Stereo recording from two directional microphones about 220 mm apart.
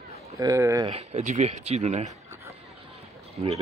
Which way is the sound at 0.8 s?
30° right (ahead or behind).